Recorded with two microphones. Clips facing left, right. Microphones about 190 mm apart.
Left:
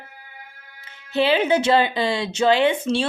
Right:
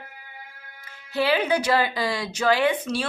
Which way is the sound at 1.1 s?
25° left (ahead or behind).